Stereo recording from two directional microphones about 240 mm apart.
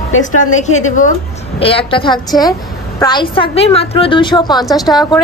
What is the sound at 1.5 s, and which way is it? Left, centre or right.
A woman's voice, left.